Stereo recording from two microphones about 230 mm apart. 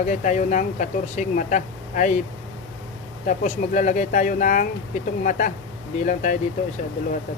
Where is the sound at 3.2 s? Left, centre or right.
Left.